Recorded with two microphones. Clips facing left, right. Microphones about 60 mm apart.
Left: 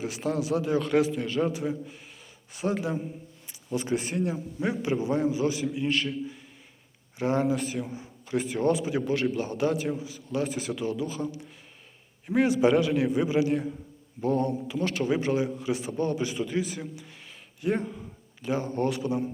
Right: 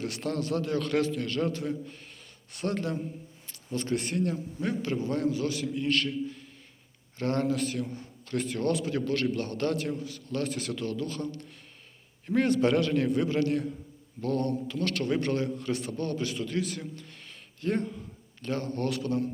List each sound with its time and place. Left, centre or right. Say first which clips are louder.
0.0 s a man's voice: left 2 dB; centre